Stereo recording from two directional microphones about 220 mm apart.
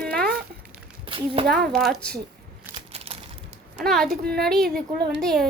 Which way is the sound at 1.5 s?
Centre (ahead or behind).